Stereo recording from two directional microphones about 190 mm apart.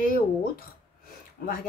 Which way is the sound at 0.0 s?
50° left (ahead or behind).